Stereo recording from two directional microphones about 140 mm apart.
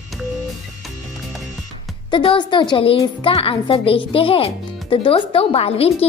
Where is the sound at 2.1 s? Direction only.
35° left (ahead or behind).